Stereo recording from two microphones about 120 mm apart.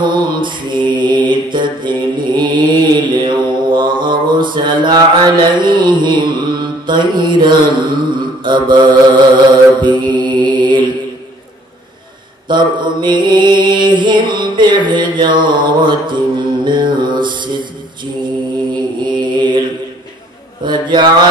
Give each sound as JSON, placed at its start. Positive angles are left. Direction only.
{"t": 0.0, "sound": "mantra", "side_deg": -40}
{"t": 12.4, "sound": "mantra", "side_deg": -40}
{"t": 19.0, "sound": "mantra", "side_deg": -40}
{"t": 20.6, "sound": "mantra", "side_deg": -40}